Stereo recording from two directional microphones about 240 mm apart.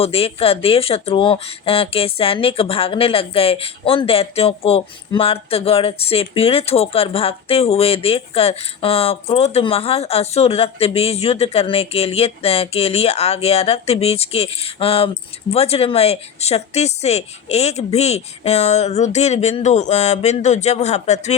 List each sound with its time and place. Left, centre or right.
0.0 s speech: left